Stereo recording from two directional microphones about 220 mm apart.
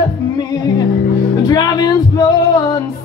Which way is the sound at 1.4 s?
15° left (ahead or behind).